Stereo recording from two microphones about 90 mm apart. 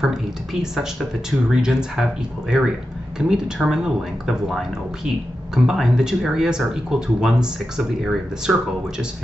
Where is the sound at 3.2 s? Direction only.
10° right (ahead or behind).